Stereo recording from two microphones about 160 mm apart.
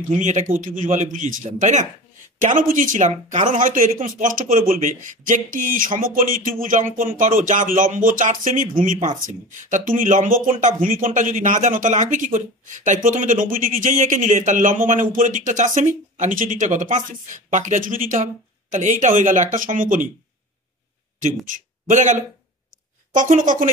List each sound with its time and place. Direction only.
0.2 s speech: 50° right (ahead or behind)
21.5 s a man's voice: 50° right (ahead or behind)